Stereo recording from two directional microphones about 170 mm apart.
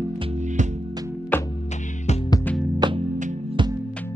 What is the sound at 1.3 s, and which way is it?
Music, 10° left (ahead or behind).